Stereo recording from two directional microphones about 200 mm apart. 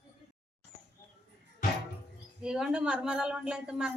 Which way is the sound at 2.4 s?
5° right (ahead or behind).